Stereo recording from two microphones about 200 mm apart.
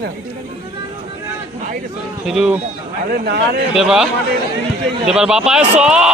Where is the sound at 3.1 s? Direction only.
55° right (ahead or behind).